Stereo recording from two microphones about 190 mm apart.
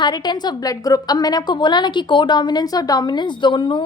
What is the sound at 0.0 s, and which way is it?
A woman's voice, 20° left (ahead or behind).